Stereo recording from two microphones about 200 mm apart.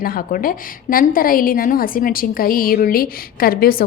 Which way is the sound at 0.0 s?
45° left (ahead or behind).